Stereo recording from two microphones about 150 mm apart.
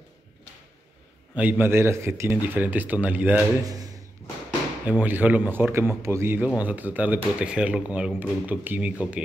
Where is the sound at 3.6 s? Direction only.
25° right (ahead or behind).